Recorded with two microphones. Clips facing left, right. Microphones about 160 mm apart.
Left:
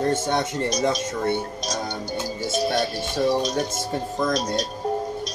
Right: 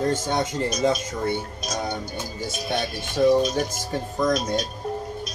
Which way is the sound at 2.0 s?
35° left (ahead or behind).